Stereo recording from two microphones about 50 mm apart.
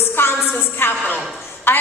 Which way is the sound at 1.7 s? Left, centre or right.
Left.